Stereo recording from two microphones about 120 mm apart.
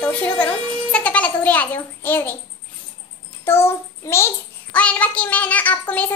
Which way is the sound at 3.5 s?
20° left (ahead or behind).